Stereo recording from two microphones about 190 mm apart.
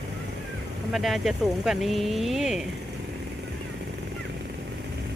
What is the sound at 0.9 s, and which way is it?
Speech, centre (ahead or behind).